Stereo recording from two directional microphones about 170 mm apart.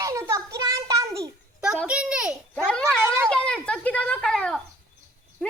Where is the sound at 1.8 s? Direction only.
5° right (ahead or behind).